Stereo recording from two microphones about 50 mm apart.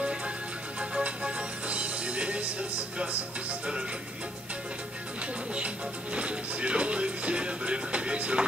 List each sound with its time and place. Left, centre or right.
0.7 s music: right
3.0 s speech: right
6.1 s music: right